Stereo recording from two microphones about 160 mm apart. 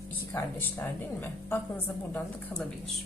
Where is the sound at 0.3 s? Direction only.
15° left (ahead or behind).